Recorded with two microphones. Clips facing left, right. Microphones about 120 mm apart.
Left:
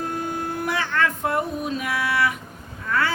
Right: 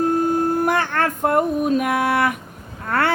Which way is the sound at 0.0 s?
45° right (ahead or behind).